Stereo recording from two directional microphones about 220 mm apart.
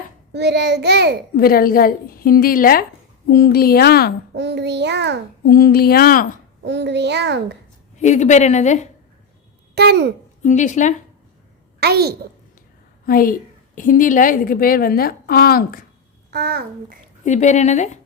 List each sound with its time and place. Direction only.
0.3 s a child's voice: 50° right (ahead or behind)
1.4 s a woman's voice: 40° left (ahead or behind)
4.4 s a child's voice: 50° right (ahead or behind)
5.5 s a woman's voice: 45° left (ahead or behind)
6.7 s a child's voice: 50° right (ahead or behind)
7.9 s a woman's voice: 30° left (ahead or behind)
9.7 s a child's voice: 50° right (ahead or behind)
10.4 s a woman's voice: 35° left (ahead or behind)
11.8 s a child's voice: 45° right (ahead or behind)
13.1 s a woman's voice: 40° left (ahead or behind)
16.3 s a child's voice: 45° right (ahead or behind)
17.2 s a woman's voice: 30° left (ahead or behind)